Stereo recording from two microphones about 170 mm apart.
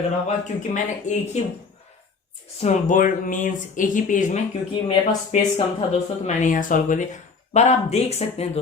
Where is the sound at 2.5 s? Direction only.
45° left (ahead or behind).